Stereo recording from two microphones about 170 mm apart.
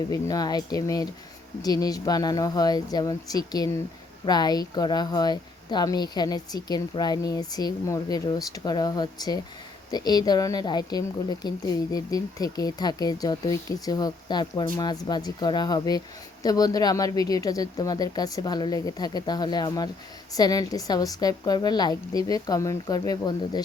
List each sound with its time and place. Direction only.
0.1 s speech: 20° left (ahead or behind)